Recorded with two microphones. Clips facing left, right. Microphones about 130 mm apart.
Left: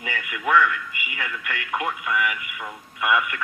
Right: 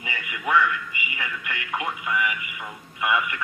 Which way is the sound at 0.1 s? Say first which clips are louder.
Left 2 dB; centre (ahead or behind).